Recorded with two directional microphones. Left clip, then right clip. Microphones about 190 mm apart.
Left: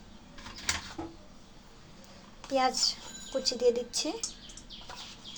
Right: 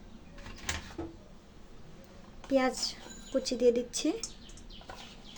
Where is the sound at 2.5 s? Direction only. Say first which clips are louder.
Left 2 dB; 45° right (ahead or behind).